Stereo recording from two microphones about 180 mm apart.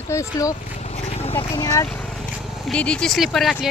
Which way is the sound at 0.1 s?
15° left (ahead or behind).